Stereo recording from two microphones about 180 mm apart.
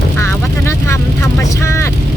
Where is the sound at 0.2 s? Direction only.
15° left (ahead or behind).